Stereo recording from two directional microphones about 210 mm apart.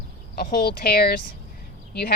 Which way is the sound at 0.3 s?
45° left (ahead or behind).